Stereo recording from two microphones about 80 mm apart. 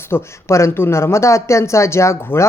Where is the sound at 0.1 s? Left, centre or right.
Left.